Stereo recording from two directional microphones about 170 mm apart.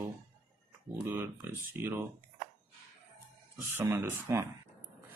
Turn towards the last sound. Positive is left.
turn(degrees=-15)  # may be behind; listen again after turning